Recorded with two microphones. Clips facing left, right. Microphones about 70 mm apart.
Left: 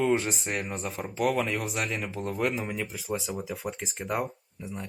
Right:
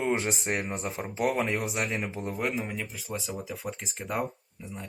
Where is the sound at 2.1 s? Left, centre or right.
Right.